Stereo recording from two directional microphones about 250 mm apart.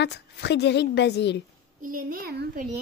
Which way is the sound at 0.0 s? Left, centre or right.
Left.